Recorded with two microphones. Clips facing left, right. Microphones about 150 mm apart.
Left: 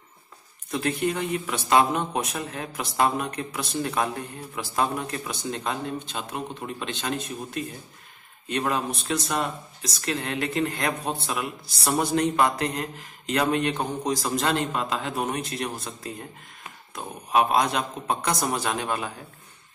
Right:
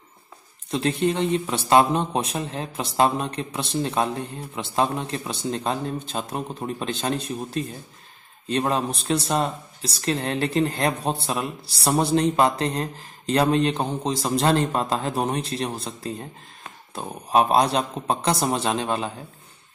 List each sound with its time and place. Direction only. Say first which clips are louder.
0.7 s speech: right 3 dB; 25° right (ahead or behind)